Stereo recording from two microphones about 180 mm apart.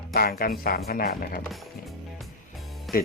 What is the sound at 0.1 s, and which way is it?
Speech, 55° left (ahead or behind).